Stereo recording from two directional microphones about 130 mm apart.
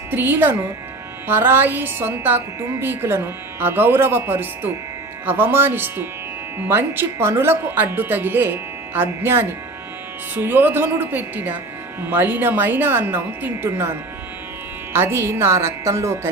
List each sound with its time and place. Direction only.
0.1 s a woman's voice: 15° right (ahead or behind)
14.9 s a woman's voice: 20° right (ahead or behind)